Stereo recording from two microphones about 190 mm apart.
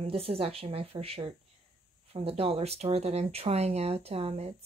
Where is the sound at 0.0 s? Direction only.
30° right (ahead or behind).